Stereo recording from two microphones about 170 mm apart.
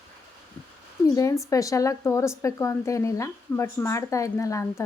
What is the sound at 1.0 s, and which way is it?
A woman's voice, 20° left (ahead or behind).